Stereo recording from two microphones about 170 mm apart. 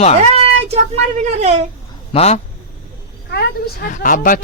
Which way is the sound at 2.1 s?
40° left (ahead or behind).